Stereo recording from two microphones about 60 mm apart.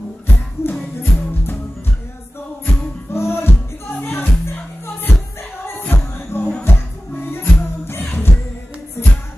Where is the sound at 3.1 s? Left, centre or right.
Left.